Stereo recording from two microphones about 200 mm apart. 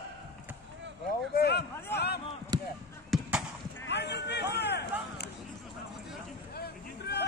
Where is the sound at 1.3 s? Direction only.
55° left (ahead or behind).